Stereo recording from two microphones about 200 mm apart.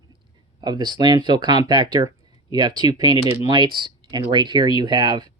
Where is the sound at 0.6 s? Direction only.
20° right (ahead or behind).